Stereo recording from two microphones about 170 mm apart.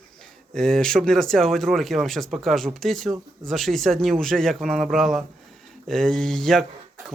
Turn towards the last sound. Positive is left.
turn(degrees=0)  # may be behind; listen again after turning